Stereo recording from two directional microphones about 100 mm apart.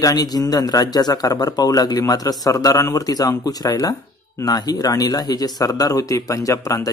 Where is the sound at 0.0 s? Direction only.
40° left (ahead or behind).